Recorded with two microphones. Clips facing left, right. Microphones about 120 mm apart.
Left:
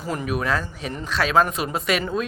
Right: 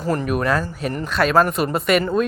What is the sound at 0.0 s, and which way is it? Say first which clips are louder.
Speech: right 6 dB; 15° left (ahead or behind).